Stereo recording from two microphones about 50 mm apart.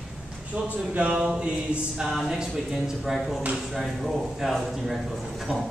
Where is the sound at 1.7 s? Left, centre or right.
Right.